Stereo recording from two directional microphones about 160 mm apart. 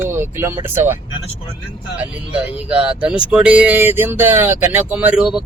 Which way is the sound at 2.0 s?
10° right (ahead or behind).